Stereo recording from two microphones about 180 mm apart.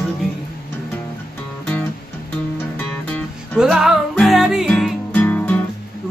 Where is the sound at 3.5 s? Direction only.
Centre (ahead or behind).